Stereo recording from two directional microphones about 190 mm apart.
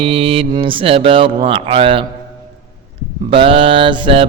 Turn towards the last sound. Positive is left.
turn(degrees=-25)  # may be behind; listen again after turning